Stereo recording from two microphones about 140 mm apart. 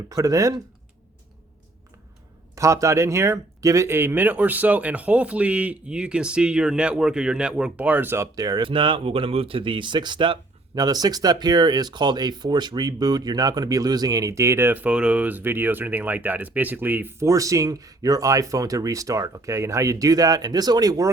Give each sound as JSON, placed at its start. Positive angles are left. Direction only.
{"t": 0.1, "sound": "speech", "side_deg": -25}
{"t": 2.6, "sound": "speech", "side_deg": -20}